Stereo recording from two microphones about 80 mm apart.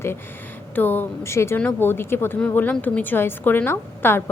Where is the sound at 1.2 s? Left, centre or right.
Left.